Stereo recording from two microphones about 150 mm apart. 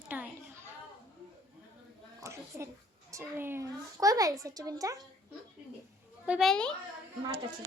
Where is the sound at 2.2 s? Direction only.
20° right (ahead or behind).